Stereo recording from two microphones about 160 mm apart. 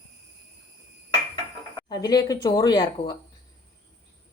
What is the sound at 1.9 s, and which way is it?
Speech, 25° left (ahead or behind).